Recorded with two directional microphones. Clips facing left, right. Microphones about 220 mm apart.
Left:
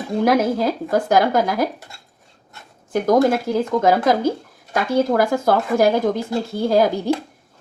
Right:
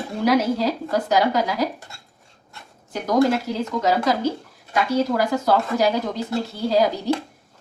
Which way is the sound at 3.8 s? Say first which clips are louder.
Left 2 dB; 50° left (ahead or behind).